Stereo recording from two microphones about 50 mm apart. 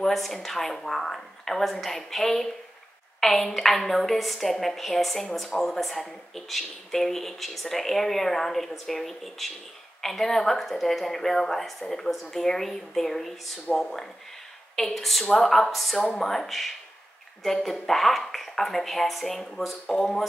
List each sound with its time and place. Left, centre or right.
0.0 s speech: centre